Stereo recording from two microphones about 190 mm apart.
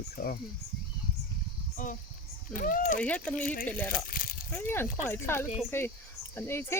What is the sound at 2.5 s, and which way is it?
Speech, 45° left (ahead or behind).